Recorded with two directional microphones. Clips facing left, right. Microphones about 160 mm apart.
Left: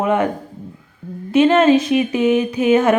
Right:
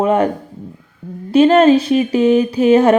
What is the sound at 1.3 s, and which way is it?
A woman's voice, 35° right (ahead or behind).